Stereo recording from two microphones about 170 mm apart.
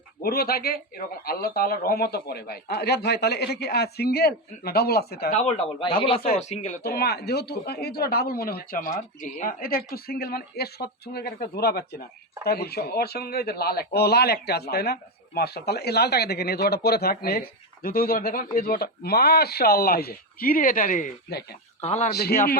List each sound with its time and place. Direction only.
0.2 s a man's voice: 65° left (ahead or behind)
5.3 s speech: 40° left (ahead or behind)
6.4 s speech: 45° left (ahead or behind)
6.8 s a man's voice: 65° left (ahead or behind); by 22.1 s 40° left (ahead or behind)
22.1 s a man's voice: 70° left (ahead or behind)